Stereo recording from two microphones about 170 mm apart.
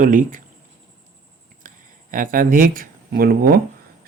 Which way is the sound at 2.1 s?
55° right (ahead or behind).